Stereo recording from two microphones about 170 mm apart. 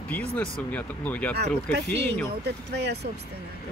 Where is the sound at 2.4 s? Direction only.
80° right.